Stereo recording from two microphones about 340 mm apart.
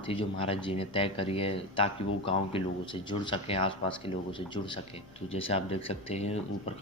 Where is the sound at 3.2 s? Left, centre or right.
Centre.